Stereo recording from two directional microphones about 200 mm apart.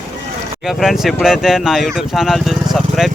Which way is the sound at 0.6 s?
Centre (ahead or behind).